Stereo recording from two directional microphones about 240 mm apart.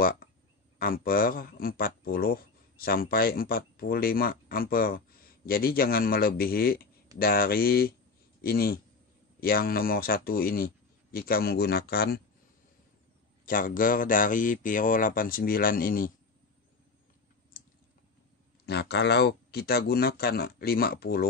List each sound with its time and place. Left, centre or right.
0.7 s a man's voice: left
13.5 s speech: left
18.7 s speech: left